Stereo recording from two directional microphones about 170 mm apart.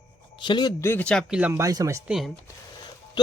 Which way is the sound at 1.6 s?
20° right (ahead or behind).